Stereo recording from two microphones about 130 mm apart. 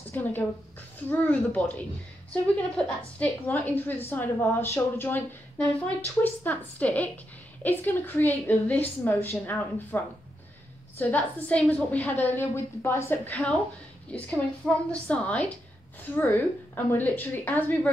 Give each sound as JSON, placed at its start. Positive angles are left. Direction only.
{"t": 0.1, "sound": "a woman's voice", "side_deg": 15}
{"t": 3.2, "sound": "a woman's voice", "side_deg": 10}